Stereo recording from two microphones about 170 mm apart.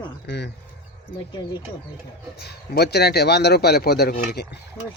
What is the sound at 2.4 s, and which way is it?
A man's voice, 70° left (ahead or behind).